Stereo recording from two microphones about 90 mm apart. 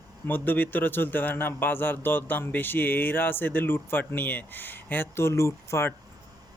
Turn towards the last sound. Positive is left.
turn(degrees=30)  # may be behind; listen again after turning